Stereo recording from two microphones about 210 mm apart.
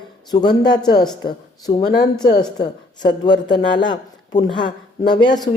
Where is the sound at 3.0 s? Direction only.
20° left (ahead or behind).